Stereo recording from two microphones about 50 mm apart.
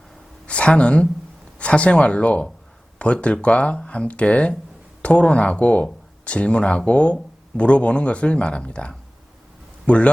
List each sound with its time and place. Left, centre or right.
0.4 s a man's voice: left